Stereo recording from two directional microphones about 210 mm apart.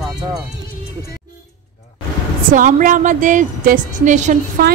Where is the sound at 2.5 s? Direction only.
40° right (ahead or behind).